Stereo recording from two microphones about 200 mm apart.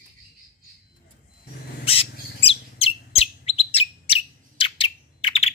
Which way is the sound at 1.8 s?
30° left (ahead or behind).